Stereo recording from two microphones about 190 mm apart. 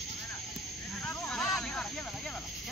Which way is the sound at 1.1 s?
10° left (ahead or behind).